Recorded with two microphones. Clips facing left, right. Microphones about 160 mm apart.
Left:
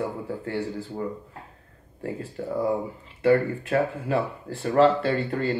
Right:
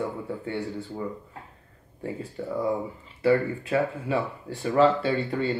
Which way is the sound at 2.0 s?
Centre (ahead or behind).